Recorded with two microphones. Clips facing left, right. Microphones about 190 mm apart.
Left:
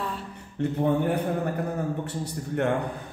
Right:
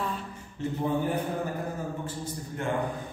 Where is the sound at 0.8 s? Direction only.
65° left (ahead or behind).